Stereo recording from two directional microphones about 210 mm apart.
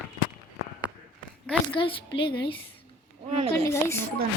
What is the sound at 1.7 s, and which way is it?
Speech, 25° left (ahead or behind).